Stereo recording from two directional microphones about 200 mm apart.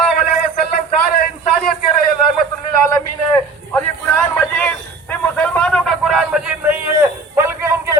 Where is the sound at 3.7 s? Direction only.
10° left (ahead or behind).